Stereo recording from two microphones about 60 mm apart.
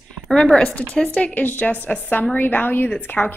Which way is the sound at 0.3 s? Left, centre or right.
Centre.